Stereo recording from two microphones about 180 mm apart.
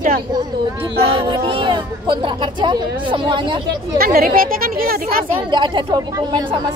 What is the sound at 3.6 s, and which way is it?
Speech, 55° right (ahead or behind).